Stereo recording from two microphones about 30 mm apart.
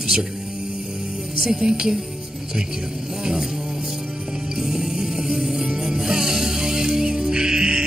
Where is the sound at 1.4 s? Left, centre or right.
Right.